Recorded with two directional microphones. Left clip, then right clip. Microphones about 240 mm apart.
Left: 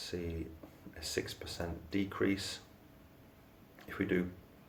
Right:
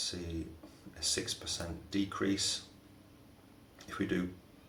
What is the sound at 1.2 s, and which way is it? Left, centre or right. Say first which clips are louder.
Speech: right 3 dB; left.